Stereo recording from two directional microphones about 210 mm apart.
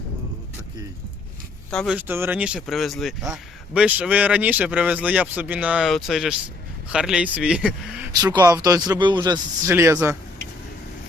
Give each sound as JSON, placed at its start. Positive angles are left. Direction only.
{"t": 1.7, "sound": "speech", "side_deg": 5}
{"t": 2.0, "sound": "speech", "side_deg": -10}
{"t": 8.2, "sound": "speech", "side_deg": -20}